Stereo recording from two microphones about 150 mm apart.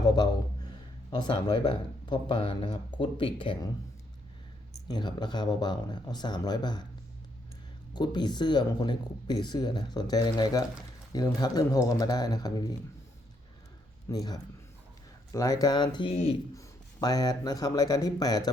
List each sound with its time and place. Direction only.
0.0 s speech: 30° left (ahead or behind)
4.9 s speech: 30° left (ahead or behind)
7.9 s speech: 30° left (ahead or behind)
14.1 s speech: 25° left (ahead or behind)
16.1 s speech: 40° left (ahead or behind)
16.6 s speech: 25° left (ahead or behind)